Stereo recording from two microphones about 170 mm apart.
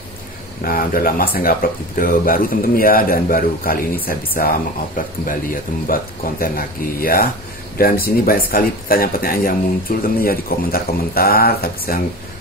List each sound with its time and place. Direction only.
0.7 s speech: 55° left (ahead or behind)